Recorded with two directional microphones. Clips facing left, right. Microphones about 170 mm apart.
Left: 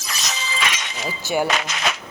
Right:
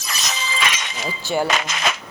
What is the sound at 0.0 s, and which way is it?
Shatter, 50° right (ahead or behind).